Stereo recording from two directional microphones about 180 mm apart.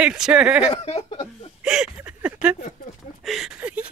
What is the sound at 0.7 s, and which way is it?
Speech, 35° left (ahead or behind).